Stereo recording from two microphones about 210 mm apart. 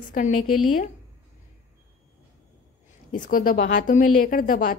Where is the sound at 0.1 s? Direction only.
35° left (ahead or behind).